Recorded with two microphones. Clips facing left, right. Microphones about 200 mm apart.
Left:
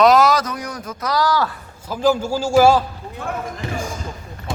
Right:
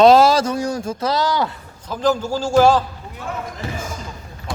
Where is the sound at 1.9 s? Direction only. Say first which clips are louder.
Left 1 dB; 10° left (ahead or behind).